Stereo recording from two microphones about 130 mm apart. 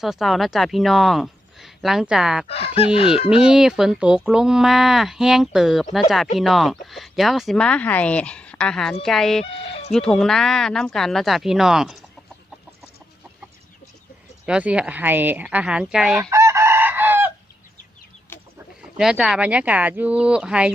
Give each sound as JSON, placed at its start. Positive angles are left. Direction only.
{"t": 0.0, "sound": "speech", "side_deg": 0}
{"t": 2.5, "sound": "fowl", "side_deg": 50}
{"t": 3.2, "sound": "speech", "side_deg": -5}
{"t": 9.4, "sound": "fowl", "side_deg": 45}
{"t": 9.9, "sound": "speech", "side_deg": 5}
{"t": 14.4, "sound": "speech", "side_deg": -10}
{"t": 16.3, "sound": "chicken", "side_deg": -20}
{"t": 18.3, "sound": "chicken", "side_deg": 15}
{"t": 18.9, "sound": "speech", "side_deg": -5}